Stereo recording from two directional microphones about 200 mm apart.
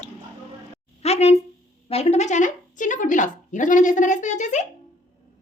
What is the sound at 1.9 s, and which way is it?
Speech, 30° left (ahead or behind).